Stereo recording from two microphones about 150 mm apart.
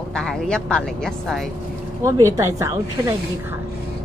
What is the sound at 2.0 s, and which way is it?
Speech, 20° right (ahead or behind).